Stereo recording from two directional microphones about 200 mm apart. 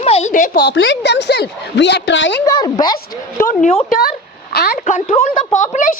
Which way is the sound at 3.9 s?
50° left (ahead or behind).